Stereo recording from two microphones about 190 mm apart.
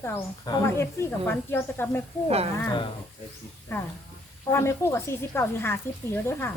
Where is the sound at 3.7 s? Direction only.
15° left (ahead or behind).